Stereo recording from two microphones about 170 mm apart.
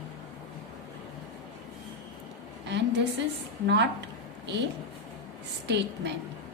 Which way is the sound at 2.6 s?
90° right.